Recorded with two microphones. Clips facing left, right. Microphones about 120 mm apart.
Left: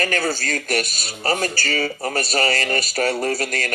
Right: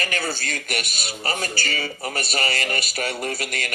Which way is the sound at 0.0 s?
45° left (ahead or behind).